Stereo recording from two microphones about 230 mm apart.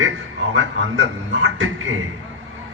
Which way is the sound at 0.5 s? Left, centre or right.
Right.